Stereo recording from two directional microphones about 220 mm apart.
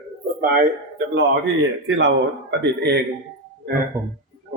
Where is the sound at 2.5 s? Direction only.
50° right (ahead or behind).